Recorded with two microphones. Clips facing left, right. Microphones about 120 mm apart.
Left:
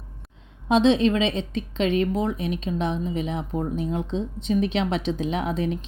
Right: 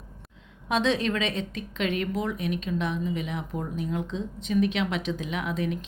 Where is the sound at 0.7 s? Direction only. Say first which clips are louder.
Left 7 dB; 25° left (ahead or behind).